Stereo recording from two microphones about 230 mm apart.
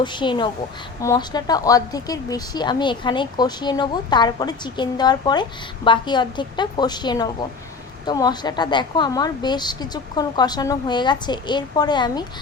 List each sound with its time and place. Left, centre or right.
0.0 s a woman's voice: centre